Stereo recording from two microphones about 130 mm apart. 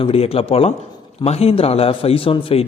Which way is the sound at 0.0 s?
50° left (ahead or behind).